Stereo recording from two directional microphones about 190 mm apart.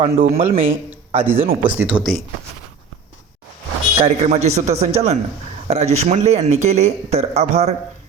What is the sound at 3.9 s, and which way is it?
Speech, 35° right (ahead or behind).